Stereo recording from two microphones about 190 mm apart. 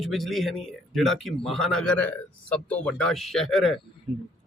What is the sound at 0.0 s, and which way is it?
Speech, centre (ahead or behind).